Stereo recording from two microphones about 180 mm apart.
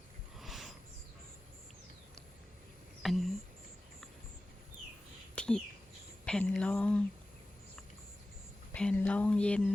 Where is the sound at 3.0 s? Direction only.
Centre (ahead or behind).